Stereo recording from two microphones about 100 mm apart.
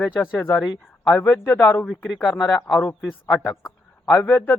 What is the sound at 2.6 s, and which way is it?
Speech, 30° left (ahead or behind).